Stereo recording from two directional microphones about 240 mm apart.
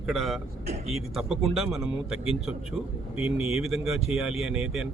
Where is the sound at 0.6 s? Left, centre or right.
Right.